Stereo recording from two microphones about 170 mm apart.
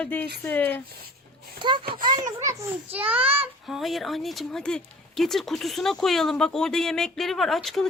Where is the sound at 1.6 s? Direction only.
30° right (ahead or behind).